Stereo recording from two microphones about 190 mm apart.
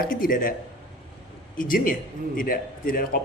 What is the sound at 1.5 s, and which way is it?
Speech, 45° left (ahead or behind).